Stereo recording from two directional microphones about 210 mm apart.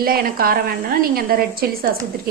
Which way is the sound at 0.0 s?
45° right (ahead or behind).